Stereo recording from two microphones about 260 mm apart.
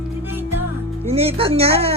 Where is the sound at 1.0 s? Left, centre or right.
Right.